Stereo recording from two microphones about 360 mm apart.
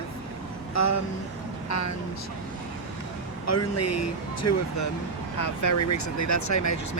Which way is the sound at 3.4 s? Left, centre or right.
Left.